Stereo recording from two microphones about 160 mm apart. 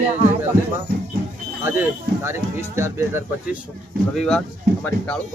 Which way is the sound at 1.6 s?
15° right (ahead or behind).